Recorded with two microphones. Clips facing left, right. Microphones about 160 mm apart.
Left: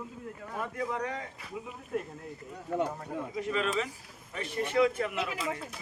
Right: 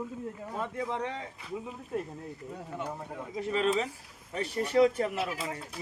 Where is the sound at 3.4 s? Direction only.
35° right (ahead or behind).